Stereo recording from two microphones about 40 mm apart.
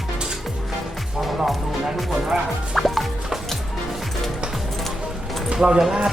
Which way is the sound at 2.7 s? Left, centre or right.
Centre.